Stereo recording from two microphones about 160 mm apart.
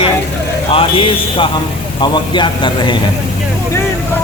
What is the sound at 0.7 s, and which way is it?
A man's voice, 35° left (ahead or behind).